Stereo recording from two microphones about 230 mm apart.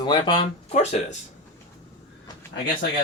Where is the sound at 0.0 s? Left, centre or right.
Centre.